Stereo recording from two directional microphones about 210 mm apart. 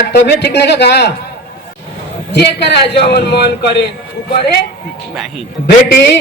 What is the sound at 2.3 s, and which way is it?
A man's voice, 55° left (ahead or behind).